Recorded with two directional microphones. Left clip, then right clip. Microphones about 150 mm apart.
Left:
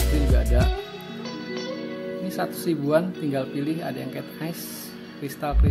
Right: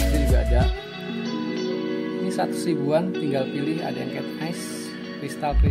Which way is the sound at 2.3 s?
Centre (ahead or behind).